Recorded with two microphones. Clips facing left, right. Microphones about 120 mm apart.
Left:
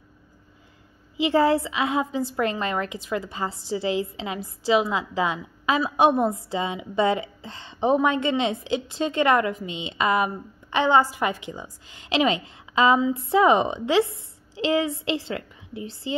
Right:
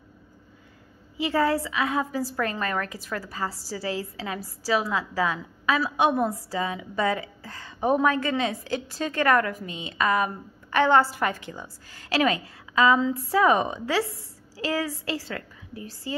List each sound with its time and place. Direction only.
1.1 s a woman's voice: 25° left (ahead or behind)